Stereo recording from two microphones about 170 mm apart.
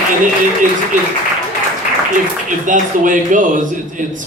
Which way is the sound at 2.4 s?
50° right (ahead or behind).